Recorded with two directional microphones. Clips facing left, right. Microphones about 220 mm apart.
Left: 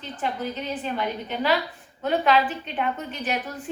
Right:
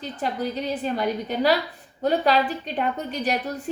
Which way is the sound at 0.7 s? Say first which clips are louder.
Right 3 dB; 40° right (ahead or behind).